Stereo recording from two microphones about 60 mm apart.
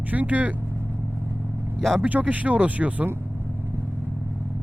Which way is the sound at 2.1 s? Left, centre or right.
Right.